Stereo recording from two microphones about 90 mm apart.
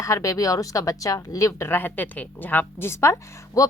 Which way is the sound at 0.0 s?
35° left (ahead or behind).